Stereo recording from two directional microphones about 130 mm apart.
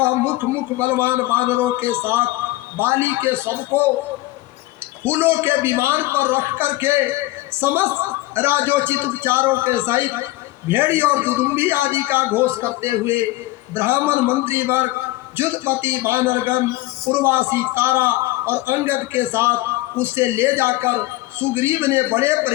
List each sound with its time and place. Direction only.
0.0 s a man's voice: 20° right (ahead or behind)
5.0 s a man's voice: 15° right (ahead or behind)